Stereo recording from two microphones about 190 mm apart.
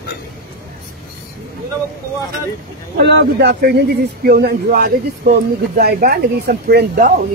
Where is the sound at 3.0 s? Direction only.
60° right (ahead or behind).